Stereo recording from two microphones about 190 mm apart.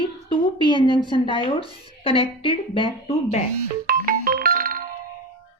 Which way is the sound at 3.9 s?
50° right (ahead or behind).